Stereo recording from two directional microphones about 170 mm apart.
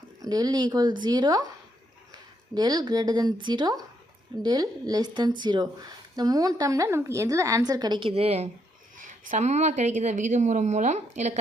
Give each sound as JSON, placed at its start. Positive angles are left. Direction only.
{"t": 0.2, "sound": "speech", "side_deg": -25}
{"t": 2.6, "sound": "speech", "side_deg": -25}
{"t": 9.0, "sound": "a woman's voice", "side_deg": -50}